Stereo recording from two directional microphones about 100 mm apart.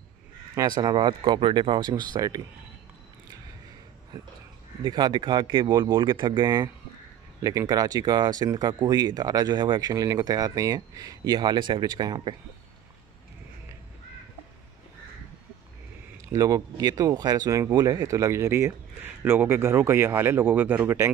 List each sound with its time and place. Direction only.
0.6 s speech: 40° right (ahead or behind)
4.1 s a sound: 35° right (ahead or behind)
4.8 s speech: 45° right (ahead or behind)
16.3 s speech: 35° right (ahead or behind)